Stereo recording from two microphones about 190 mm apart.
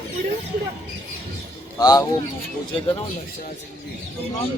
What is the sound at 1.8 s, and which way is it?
Speech, 20° left (ahead or behind).